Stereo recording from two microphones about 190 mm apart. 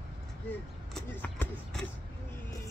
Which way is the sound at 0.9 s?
5° left (ahead or behind).